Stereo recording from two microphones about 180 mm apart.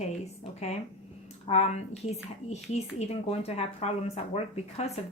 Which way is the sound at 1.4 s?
35° left (ahead or behind).